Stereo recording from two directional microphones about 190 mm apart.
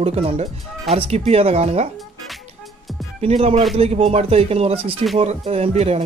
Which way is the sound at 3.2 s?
35° right (ahead or behind).